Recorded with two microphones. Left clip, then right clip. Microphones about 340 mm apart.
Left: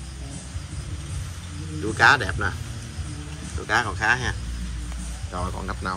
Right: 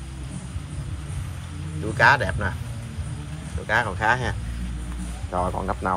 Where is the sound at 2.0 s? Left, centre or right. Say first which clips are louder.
Even; centre.